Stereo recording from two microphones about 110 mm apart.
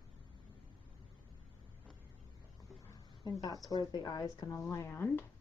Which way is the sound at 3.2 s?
40° left (ahead or behind).